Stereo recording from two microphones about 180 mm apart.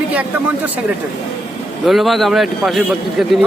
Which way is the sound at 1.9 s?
Centre (ahead or behind).